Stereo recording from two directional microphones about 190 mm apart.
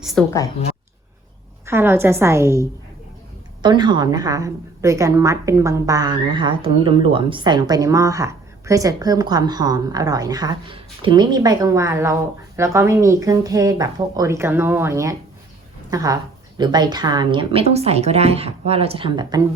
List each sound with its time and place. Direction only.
0.0 s a woman's voice: centre (ahead or behind)
1.6 s a woman's voice: 10° right (ahead or behind)